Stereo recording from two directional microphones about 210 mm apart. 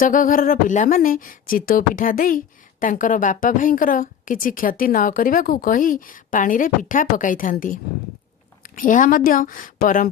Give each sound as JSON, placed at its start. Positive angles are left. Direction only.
{"t": 0.0, "sound": "a woman's voice", "side_deg": 40}